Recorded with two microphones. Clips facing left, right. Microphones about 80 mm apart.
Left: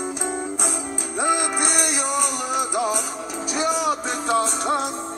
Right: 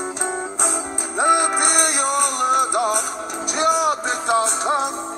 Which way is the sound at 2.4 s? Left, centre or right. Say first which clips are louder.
Right 5 dB; right.